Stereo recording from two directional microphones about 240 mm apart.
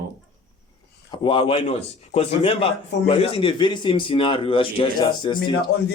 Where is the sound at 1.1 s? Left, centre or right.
Left.